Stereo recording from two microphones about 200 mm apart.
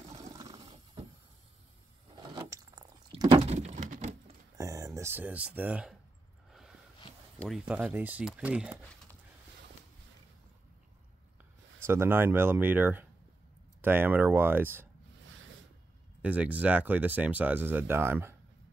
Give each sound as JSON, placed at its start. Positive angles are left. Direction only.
{"t": 0.2, "sound": "a sound", "side_deg": -20}
{"t": 2.2, "sound": "a sound", "side_deg": -20}
{"t": 4.6, "sound": "speech", "side_deg": -15}
{"t": 7.3, "sound": "speech", "side_deg": 0}
{"t": 11.8, "sound": "speech", "side_deg": -10}
{"t": 16.2, "sound": "speech", "side_deg": -5}